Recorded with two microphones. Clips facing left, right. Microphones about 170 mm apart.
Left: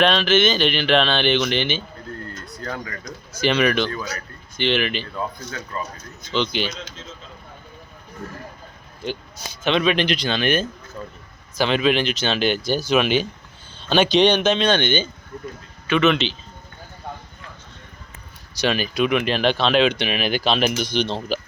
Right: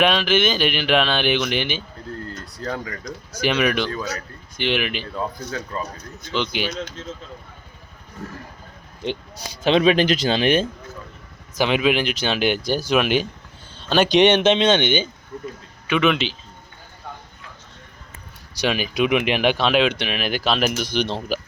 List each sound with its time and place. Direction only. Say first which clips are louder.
0.0 s speech: left 1 dB; 10° right (ahead or behind)
5.2 s speech: right 2 dB; 20° right (ahead or behind)
6.3 s speech: left 1 dB; 10° right (ahead or behind)
9.0 s speech: right 2 dB; 35° right (ahead or behind)
11.5 s speech: even; 15° right (ahead or behind)
14.2 s speech: right 4 dB; 25° right (ahead or behind)
18.6 s speech: even; 10° right (ahead or behind)